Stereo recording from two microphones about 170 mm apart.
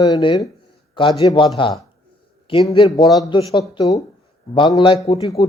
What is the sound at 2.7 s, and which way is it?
A man's voice, 30° left (ahead or behind).